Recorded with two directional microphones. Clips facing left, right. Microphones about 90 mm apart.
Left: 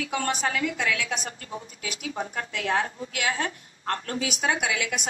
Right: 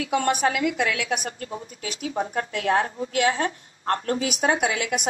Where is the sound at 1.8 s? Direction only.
35° right (ahead or behind).